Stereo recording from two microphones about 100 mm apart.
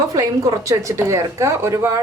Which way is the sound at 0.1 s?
35° right (ahead or behind).